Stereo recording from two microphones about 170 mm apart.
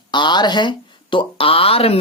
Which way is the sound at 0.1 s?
25° left (ahead or behind).